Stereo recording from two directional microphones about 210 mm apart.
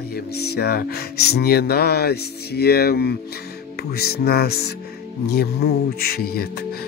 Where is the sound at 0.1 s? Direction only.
50° left (ahead or behind).